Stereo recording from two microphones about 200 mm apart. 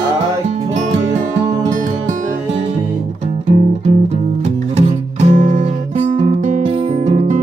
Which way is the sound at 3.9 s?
35° right (ahead or behind).